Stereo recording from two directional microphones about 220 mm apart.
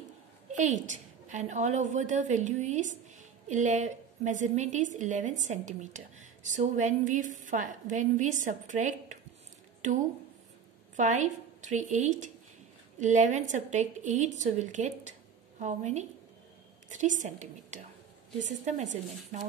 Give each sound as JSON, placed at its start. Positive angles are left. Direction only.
{"t": 0.5, "sound": "a woman's voice", "side_deg": -35}
{"t": 11.0, "sound": "a woman's voice", "side_deg": -35}